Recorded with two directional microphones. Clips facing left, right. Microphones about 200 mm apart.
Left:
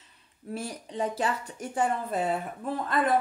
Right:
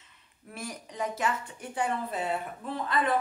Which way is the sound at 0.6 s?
30° left (ahead or behind).